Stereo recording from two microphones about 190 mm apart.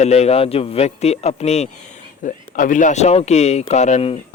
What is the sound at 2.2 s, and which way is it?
Speech, 45° left (ahead or behind).